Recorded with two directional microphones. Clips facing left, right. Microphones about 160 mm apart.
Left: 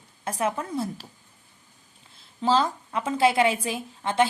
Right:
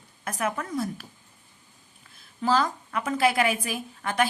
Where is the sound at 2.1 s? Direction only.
25° left (ahead or behind).